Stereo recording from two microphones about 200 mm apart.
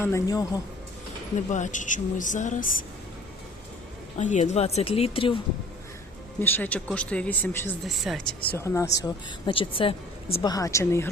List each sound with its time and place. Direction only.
0.0 s speech: 15° left (ahead or behind)
1.5 s speech: 40° left (ahead or behind)
4.2 s speech: 35° left (ahead or behind)
6.4 s speech: 10° left (ahead or behind)
7.9 s speech: centre (ahead or behind)
8.5 s speech: 15° left (ahead or behind)